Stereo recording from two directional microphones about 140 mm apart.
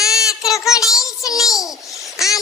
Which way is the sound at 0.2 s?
25° left (ahead or behind).